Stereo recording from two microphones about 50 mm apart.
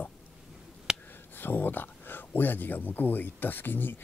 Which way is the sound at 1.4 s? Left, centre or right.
Left.